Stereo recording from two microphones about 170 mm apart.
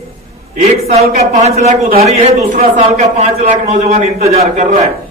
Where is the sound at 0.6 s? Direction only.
40° right (ahead or behind).